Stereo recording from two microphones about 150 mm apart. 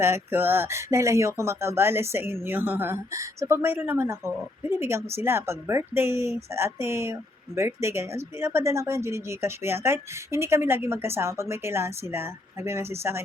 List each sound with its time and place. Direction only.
0.0 s a woman's voice: 15° right (ahead or behind)